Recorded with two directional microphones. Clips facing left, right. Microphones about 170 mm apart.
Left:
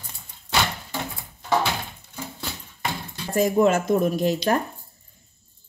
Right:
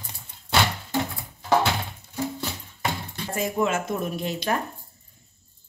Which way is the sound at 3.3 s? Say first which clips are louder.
Left 6 dB; 40° left (ahead or behind).